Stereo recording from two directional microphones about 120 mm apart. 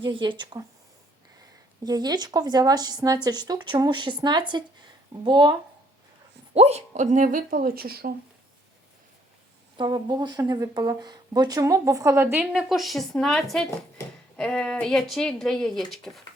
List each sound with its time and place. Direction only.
0.0 s speech: 40° right (ahead or behind)
1.8 s speech: 35° right (ahead or behind)
6.5 s speech: 60° right (ahead or behind); by 7.3 s 85° right
9.7 s speech: 40° right (ahead or behind); by 12.5 s 20° right (ahead or behind)
12.5 s speech: centre (ahead or behind)